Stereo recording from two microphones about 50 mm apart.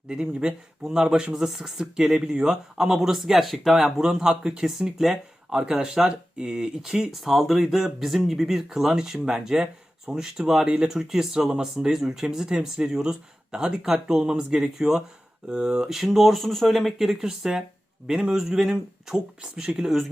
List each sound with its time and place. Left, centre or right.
0.1 s speech: centre